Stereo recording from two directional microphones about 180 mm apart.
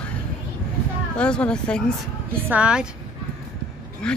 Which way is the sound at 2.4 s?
5° right (ahead or behind).